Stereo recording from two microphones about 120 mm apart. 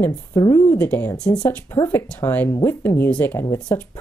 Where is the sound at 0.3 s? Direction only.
30° left (ahead or behind).